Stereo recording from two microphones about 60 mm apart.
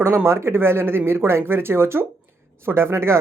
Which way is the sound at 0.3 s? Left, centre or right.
Right.